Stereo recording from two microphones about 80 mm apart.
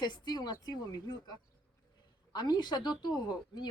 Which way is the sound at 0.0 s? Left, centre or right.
Left.